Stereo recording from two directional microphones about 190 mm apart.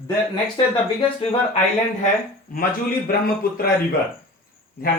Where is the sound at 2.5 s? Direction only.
50° left (ahead or behind).